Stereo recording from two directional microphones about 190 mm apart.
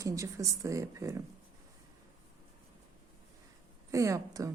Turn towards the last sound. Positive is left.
turn(degrees=-15)  # may be behind; listen again after turning